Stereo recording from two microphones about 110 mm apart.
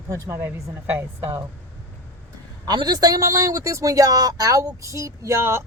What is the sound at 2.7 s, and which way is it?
Speech, 40° right (ahead or behind).